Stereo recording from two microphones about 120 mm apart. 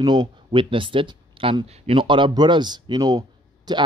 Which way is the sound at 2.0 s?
40° right (ahead or behind).